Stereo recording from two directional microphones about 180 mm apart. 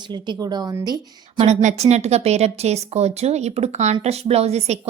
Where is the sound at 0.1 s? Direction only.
25° right (ahead or behind).